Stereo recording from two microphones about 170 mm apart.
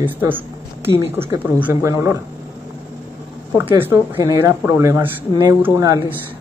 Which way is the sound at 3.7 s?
15° right (ahead or behind).